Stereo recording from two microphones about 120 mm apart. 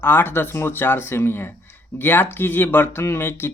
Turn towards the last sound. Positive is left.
turn(degrees=20)  # may be behind; listen again after turning